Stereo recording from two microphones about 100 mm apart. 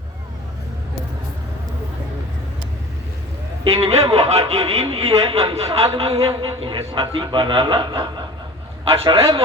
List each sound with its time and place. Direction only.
3.6 s a man's voice: 80° right; by 8.2 s 50° right (ahead or behind)
8.9 s a man's voice: 70° right (ahead or behind)